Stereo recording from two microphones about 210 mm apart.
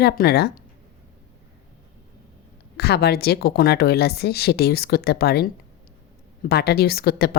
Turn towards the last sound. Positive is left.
turn(degrees=50)  # may be behind; listen again after turning